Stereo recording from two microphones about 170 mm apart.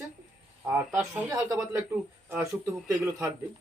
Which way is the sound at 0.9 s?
20° right (ahead or behind).